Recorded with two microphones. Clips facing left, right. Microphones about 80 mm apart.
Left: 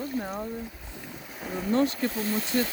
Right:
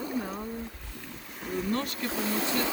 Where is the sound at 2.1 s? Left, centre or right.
Right.